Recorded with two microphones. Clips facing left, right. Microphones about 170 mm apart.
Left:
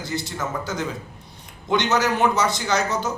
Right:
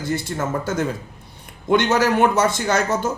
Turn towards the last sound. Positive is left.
turn(degrees=-50)  # may be behind; listen again after turning